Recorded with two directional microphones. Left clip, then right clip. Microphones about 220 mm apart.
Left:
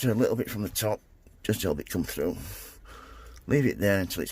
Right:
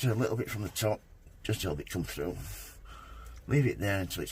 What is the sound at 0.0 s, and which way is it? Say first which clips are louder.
Speech: left 6 dB; 35° left (ahead or behind).